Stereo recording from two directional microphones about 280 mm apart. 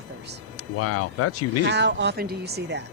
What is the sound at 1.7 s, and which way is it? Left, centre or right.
Speech, right.